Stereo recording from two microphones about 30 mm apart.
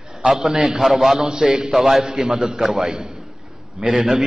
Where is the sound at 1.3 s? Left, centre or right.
Right.